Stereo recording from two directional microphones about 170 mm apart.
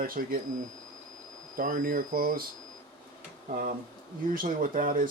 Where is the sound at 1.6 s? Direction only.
55° right (ahead or behind).